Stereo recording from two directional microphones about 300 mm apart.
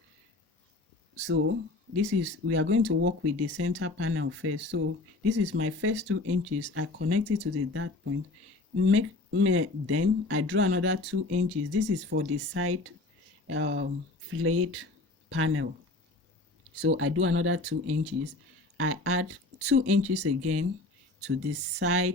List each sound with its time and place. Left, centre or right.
1.1 s speech: right
17.0 s speech: right